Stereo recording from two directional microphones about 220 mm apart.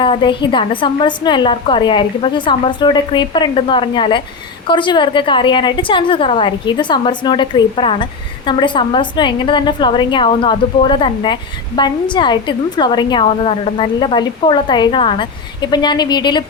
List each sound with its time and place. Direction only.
0.0 s a woman's voice: 20° left (ahead or behind)